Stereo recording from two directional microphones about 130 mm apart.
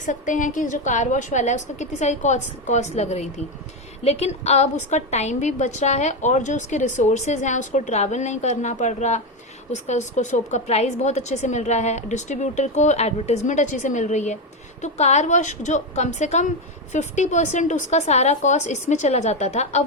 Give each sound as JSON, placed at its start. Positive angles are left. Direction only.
{"t": 0.0, "sound": "a woman's voice", "side_deg": 75}